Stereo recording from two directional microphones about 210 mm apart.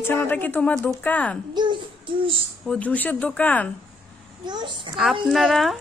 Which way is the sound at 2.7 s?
5° left (ahead or behind).